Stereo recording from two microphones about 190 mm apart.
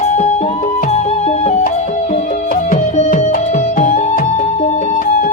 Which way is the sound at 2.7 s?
45° left (ahead or behind).